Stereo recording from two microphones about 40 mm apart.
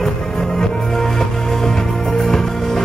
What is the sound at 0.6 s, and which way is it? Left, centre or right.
Music, centre.